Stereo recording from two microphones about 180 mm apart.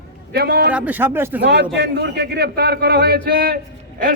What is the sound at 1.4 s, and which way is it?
A man's voice, 70° right (ahead or behind).